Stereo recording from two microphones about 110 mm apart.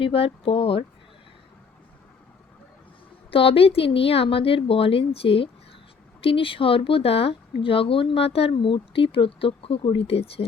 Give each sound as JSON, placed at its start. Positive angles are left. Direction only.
{"t": 0.0, "sound": "speech", "side_deg": 60}
{"t": 3.3, "sound": "speech", "side_deg": 60}